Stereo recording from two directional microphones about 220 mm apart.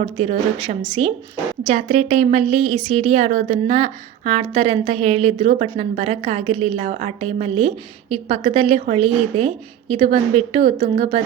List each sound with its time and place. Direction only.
0.0 s a woman's voice: 30° right (ahead or behind)
10.6 s speech: 40° right (ahead or behind)